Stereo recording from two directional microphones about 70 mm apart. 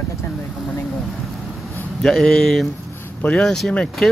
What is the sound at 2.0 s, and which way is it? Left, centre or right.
Speech, centre.